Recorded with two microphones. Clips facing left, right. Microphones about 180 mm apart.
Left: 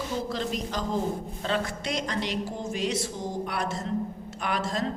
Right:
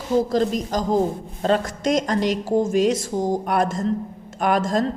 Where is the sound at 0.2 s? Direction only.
40° right (ahead or behind).